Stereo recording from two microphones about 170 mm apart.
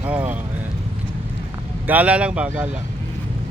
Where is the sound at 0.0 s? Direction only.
10° right (ahead or behind).